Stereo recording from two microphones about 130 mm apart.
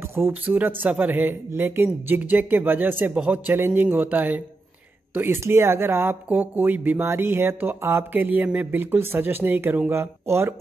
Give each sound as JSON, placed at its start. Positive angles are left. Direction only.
{"t": 0.1, "sound": "speech", "side_deg": -15}